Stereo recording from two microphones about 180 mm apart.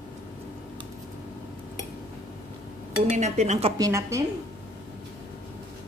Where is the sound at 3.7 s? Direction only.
20° right (ahead or behind).